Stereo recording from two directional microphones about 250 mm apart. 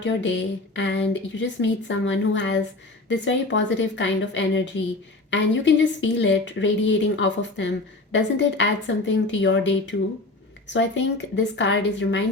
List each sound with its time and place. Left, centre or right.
0.0 s a woman's voice: left